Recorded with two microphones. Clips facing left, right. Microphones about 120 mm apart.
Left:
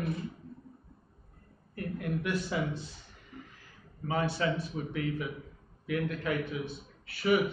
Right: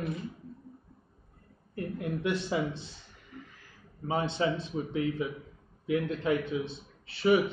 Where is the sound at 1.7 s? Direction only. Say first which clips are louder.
Right 1 dB; 25° right (ahead or behind).